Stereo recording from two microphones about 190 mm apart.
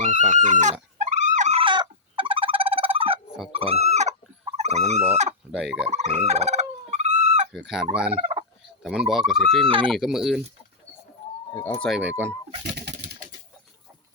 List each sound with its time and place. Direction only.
0.0 s speech: 40° right (ahead or behind)
1.2 s fowl: 40° right (ahead or behind)
3.5 s speech: 30° right (ahead or behind)
3.8 s chicken: 35° right (ahead or behind)
4.5 s fowl: 35° right (ahead or behind)
5.5 s speech: 5° right (ahead or behind)
6.2 s fowl: 35° right (ahead or behind)
7.5 s speech: centre (ahead or behind)
8.1 s fowl: 35° right (ahead or behind)
8.8 s speech: 5° right (ahead or behind)
9.6 s speech: 25° right (ahead or behind)
9.9 s speech: centre (ahead or behind)
11.5 s speech: 10° left (ahead or behind)
11.9 s speech: 5° right (ahead or behind)